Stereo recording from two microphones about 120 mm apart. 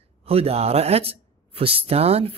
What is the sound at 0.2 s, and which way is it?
Speech, 55° right (ahead or behind).